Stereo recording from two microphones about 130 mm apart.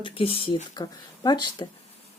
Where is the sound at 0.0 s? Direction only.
45° left (ahead or behind).